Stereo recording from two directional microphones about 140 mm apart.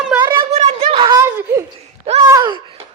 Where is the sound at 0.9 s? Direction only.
30° right (ahead or behind).